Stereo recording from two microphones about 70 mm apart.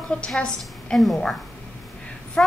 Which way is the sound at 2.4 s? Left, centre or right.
Centre.